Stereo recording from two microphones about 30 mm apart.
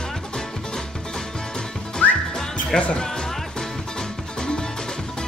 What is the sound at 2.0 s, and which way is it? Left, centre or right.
Music, left.